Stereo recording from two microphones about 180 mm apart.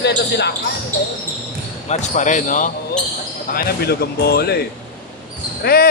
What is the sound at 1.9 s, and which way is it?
Speech, 40° left (ahead or behind).